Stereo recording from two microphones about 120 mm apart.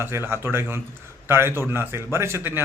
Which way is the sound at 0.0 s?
20° right (ahead or behind).